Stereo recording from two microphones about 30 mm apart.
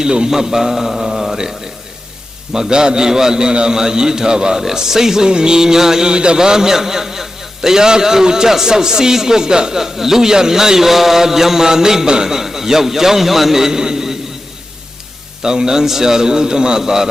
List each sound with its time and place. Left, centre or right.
0.0 s a sound: right
0.3 s a man's voice: centre
1.0 s mantra: centre
2.5 s a man's voice: right
3.1 s a man's voice: centre
3.3 s a man's voice: right
5.3 s a man's voice: right
6.1 s a man's voice: right
15.4 s a man's voice: right